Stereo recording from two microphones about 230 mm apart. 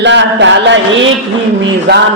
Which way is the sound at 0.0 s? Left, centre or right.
Right.